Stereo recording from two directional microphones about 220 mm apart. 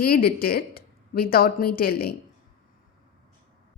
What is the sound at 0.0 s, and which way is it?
Speech, 45° left (ahead or behind).